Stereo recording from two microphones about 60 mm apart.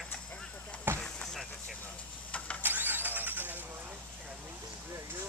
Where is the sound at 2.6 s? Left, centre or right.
Right.